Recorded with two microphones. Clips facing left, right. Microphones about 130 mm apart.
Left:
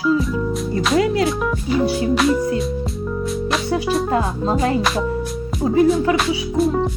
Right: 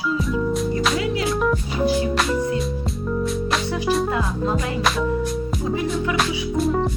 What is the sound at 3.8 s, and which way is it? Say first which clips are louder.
Speech: left 1 dB; centre (ahead or behind).